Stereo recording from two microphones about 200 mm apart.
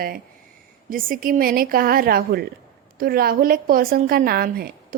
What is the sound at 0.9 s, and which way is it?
A woman's voice, 45° right (ahead or behind).